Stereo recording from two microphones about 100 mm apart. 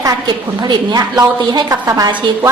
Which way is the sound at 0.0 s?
45° right (ahead or behind).